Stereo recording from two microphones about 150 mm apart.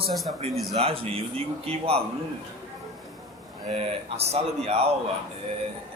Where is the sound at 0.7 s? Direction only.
40° right (ahead or behind).